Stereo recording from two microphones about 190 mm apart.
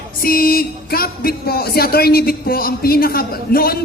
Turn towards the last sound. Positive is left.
turn(degrees=50)  # may be behind; listen again after turning